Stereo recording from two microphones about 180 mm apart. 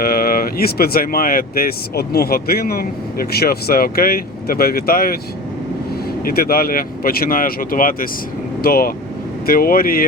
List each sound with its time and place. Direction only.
0.0 s speech: 55° left (ahead or behind)
6.2 s speech: 55° left (ahead or behind)